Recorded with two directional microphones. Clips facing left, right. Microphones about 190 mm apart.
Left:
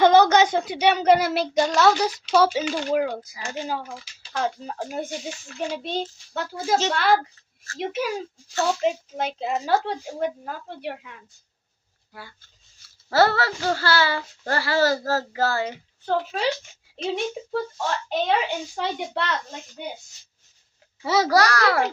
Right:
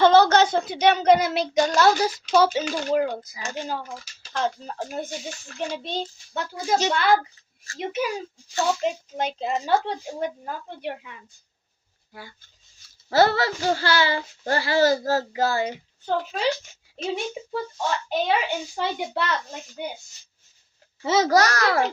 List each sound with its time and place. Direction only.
0.0 s child singing: 15° left (ahead or behind); by 2.1 s centre (ahead or behind)
2.3 s speech: 5° left (ahead or behind)
2.9 s child singing: 5° left (ahead or behind)
4.4 s child singing: 5° left (ahead or behind)
5.5 s speech: 5° left (ahead or behind)
13.1 s speech: 20° right (ahead or behind)
16.0 s speech: centre (ahead or behind)
21.0 s a child's voice: 20° right (ahead or behind)